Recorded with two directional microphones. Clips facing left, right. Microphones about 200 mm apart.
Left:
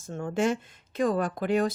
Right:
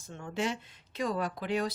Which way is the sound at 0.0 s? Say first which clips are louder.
Left 7 dB; 45° left (ahead or behind).